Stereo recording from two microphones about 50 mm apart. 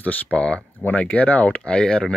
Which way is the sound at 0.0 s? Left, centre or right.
Left.